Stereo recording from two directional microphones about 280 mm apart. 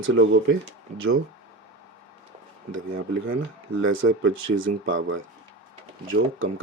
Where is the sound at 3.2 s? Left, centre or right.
Right.